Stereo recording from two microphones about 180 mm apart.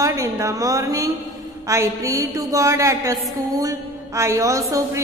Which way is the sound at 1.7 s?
15° right (ahead or behind).